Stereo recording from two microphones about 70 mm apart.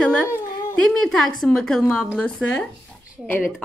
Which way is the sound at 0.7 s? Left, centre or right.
Centre.